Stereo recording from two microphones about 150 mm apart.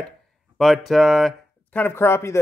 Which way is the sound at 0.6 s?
Centre (ahead or behind).